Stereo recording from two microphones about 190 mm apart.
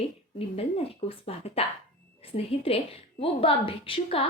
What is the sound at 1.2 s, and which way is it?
A woman's voice, 30° left (ahead or behind).